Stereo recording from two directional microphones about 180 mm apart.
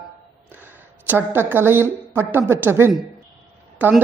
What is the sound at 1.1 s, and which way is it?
Speech, 10° right (ahead or behind).